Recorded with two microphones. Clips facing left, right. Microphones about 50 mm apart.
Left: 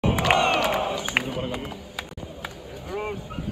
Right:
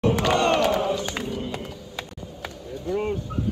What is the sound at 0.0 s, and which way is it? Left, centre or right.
Crowd, centre.